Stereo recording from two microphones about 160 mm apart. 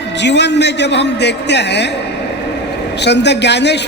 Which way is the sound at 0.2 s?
90° left.